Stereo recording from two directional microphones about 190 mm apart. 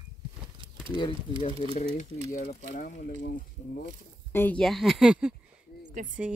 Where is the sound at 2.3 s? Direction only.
40° left (ahead or behind).